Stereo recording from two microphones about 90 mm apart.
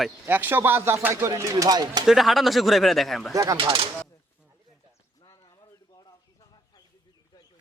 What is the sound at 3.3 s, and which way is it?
Speech, 40° right (ahead or behind).